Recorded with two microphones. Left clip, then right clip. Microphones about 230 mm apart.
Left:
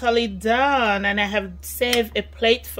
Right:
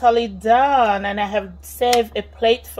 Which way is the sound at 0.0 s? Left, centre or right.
Left.